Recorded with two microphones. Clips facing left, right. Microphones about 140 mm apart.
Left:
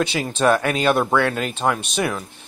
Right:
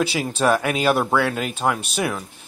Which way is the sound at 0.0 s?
5° right (ahead or behind).